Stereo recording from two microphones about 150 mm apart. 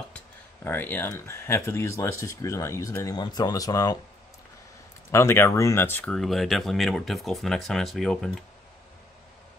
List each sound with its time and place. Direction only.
0.7 s speech: 15° left (ahead or behind)
5.1 s speech: 15° left (ahead or behind)